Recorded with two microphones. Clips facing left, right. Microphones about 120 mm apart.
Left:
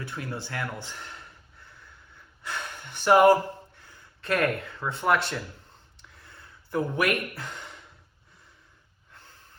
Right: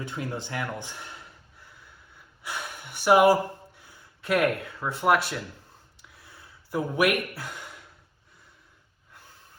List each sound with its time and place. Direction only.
0.0 s speech: 20° right (ahead or behind)
2.4 s speech: 10° right (ahead or behind)
6.0 s a sound: 5° right (ahead or behind)